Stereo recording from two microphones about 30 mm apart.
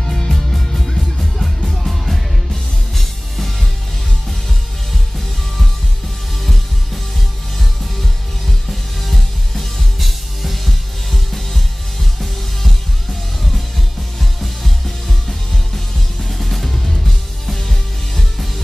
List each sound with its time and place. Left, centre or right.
0.1 s music: centre
6.4 s music: centre